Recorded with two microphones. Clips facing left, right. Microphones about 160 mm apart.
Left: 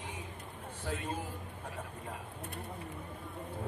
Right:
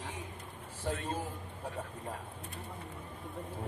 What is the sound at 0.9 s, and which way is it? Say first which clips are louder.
Speech: right 1 dB; 10° left (ahead or behind).